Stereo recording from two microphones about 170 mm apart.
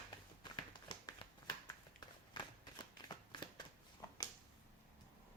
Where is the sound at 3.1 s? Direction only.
25° left (ahead or behind).